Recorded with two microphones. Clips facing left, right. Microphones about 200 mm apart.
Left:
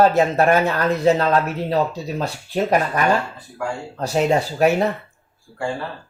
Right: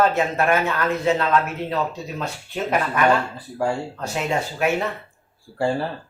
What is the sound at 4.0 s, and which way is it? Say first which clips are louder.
Speech: left 6 dB; 35° left (ahead or behind).